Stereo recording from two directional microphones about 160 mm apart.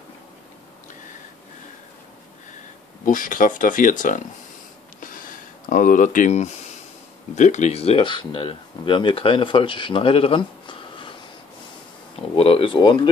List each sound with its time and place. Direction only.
3.1 s speech: 55° left (ahead or behind)
5.0 s a sound: 60° left (ahead or behind)
7.3 s speech: 50° left (ahead or behind); by 11.1 s 30° left (ahead or behind)
12.4 s speech: 35° left (ahead or behind)